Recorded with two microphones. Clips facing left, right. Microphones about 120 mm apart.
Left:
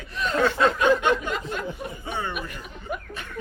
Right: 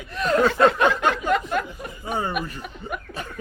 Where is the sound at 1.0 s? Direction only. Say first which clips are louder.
Right 2 dB; 40° right (ahead or behind).